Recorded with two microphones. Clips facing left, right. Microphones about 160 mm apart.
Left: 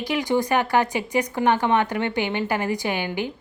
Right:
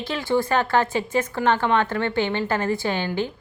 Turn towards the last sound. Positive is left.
turn(degrees=15)  # may be behind; listen again after turning